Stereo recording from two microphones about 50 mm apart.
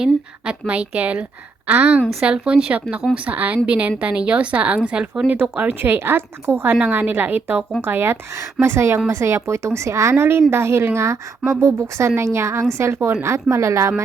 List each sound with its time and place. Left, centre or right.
0.7 s a woman's voice: right
5.3 s speech: right
6.8 s a woman's voice: right
7.8 s speech: right
8.6 s a woman's voice: right
10.5 s a woman's voice: right
12.9 s speech: right
13.2 s a woman's voice: right